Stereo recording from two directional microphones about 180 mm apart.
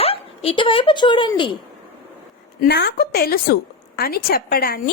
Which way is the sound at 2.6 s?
65° left (ahead or behind).